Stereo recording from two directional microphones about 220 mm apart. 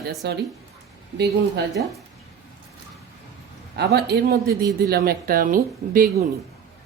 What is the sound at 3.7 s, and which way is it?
A woman's voice, 45° right (ahead or behind).